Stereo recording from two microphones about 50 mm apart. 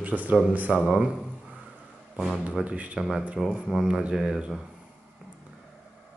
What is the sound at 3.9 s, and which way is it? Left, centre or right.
Speech, right.